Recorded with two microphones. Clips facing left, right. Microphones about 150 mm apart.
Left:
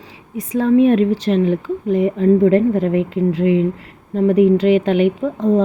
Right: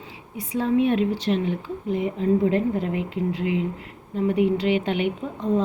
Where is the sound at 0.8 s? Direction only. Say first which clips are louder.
Left 8 dB; 45° left (ahead or behind).